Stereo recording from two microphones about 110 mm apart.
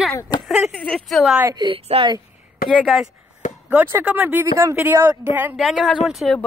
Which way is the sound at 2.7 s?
Centre (ahead or behind).